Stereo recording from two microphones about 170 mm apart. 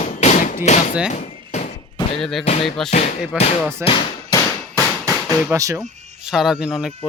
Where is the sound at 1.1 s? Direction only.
45° left (ahead or behind).